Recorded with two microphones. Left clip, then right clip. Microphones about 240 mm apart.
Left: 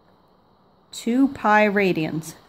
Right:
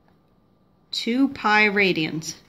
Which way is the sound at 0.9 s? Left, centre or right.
Left.